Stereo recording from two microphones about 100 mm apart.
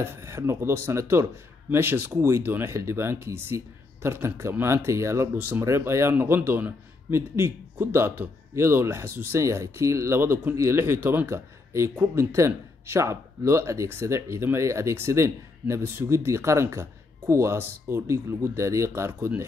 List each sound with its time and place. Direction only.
0.0 s speech: 30° right (ahead or behind)